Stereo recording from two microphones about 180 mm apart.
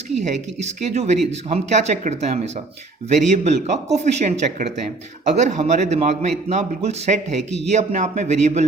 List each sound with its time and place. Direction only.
0.2 s a man's voice: 40° right (ahead or behind)